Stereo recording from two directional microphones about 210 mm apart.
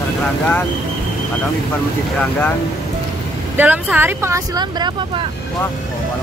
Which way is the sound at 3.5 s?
5° right (ahead or behind).